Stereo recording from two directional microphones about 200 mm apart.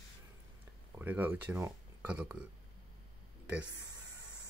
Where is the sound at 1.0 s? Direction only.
10° right (ahead or behind).